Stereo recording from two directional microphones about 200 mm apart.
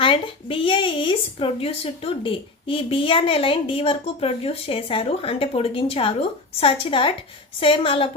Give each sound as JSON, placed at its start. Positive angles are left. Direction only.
{"t": 0.0, "sound": "a woman's voice", "side_deg": 25}